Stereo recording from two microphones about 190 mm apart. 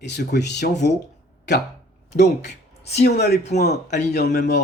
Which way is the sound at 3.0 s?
60° left (ahead or behind).